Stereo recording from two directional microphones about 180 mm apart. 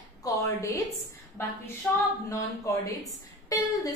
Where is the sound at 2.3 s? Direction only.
15° left (ahead or behind).